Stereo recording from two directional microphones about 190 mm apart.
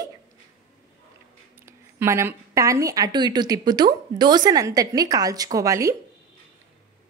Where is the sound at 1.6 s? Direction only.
15° right (ahead or behind).